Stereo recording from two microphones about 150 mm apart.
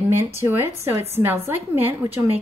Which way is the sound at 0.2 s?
15° right (ahead or behind).